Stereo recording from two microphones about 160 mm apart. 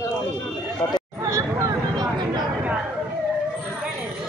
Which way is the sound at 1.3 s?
15° right (ahead or behind).